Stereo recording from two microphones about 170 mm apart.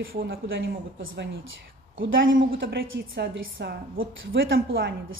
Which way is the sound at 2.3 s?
60° right (ahead or behind).